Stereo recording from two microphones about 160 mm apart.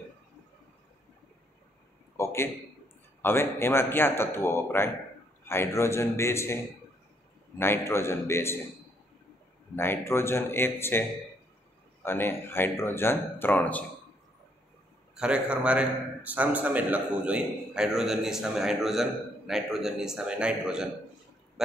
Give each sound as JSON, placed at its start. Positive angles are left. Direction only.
{"t": 2.1, "sound": "a man's voice", "side_deg": 15}
{"t": 9.8, "sound": "speech", "side_deg": 15}
{"t": 15.1, "sound": "a man's voice", "side_deg": -5}